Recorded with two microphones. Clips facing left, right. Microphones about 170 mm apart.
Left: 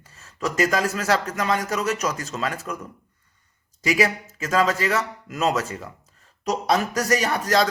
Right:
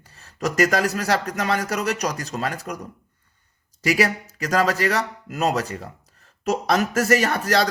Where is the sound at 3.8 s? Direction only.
40° right (ahead or behind).